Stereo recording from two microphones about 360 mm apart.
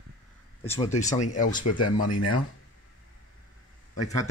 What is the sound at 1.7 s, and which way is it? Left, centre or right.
Speech, left.